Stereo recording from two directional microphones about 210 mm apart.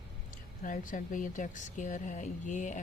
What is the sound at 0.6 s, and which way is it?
Speech, 40° left (ahead or behind).